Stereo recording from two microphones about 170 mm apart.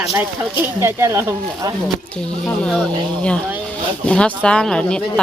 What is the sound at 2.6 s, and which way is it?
Speech, 5° left (ahead or behind).